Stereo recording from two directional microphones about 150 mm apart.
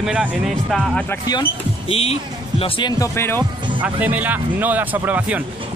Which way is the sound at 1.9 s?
40° left (ahead or behind).